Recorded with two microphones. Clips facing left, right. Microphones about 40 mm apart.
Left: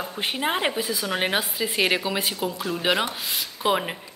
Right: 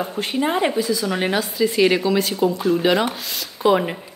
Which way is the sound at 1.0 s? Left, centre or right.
Centre.